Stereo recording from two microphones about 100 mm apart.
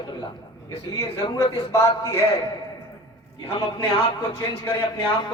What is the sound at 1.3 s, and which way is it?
Speech, 30° left (ahead or behind).